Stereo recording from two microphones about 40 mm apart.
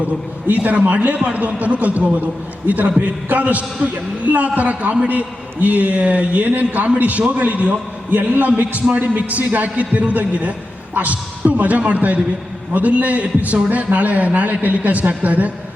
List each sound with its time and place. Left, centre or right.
0.4 s a man's voice: right
9.6 s a man's voice: right